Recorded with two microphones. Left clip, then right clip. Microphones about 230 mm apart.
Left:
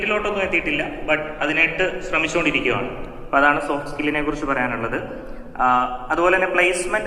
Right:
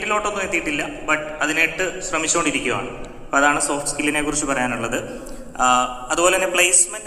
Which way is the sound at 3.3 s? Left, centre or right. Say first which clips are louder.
Even; right.